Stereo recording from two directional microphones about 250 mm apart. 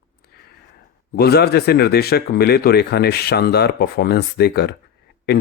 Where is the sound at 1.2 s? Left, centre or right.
Left.